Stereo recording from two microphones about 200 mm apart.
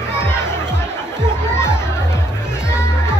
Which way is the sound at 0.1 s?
10° left (ahead or behind).